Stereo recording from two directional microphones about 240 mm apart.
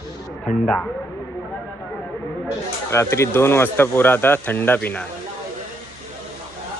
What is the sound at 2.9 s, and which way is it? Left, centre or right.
Speech, centre.